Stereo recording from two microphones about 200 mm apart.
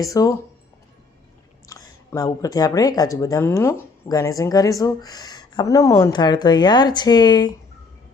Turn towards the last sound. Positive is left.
turn(degrees=20)  # may be behind; listen again after turning